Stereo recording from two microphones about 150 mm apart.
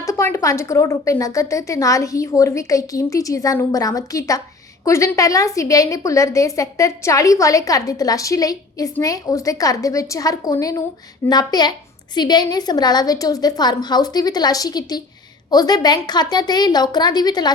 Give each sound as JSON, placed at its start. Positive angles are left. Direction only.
{"t": 0.0, "sound": "a woman's voice", "side_deg": 20}